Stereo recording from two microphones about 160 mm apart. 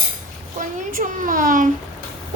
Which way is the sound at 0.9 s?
60° right (ahead or behind).